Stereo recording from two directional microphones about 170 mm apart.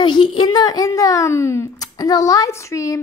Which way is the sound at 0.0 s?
25° left (ahead or behind).